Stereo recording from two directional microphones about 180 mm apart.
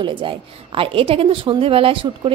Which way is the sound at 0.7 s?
30° right (ahead or behind).